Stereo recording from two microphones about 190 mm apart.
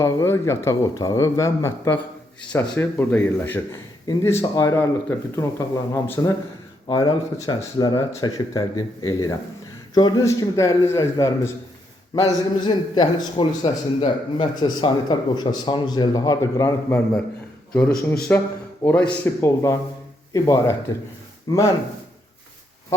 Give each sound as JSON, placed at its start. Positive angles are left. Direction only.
{"t": 0.0, "sound": "a man's voice", "side_deg": 15}